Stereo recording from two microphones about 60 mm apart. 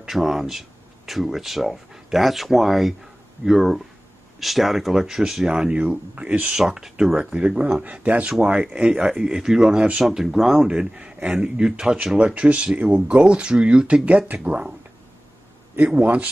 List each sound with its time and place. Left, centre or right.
0.0 s speech: centre
5.8 s speech: right
6.5 s speech: centre
7.3 s speech: centre
10.0 s speech: centre; by 14.7 s right
15.9 s speech: right